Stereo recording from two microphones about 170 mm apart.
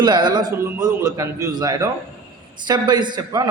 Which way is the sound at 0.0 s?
25° right (ahead or behind).